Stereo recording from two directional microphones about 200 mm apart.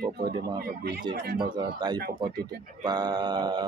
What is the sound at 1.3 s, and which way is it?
Speech, 20° right (ahead or behind).